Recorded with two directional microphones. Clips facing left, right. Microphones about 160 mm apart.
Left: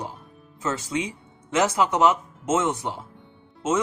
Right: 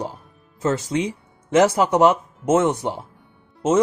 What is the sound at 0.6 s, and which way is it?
Speech, 40° right (ahead or behind).